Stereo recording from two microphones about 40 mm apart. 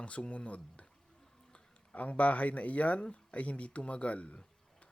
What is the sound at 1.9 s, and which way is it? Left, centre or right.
Speech, left.